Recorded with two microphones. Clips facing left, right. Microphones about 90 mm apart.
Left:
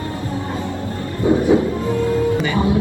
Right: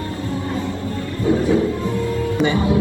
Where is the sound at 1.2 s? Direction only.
20° left (ahead or behind).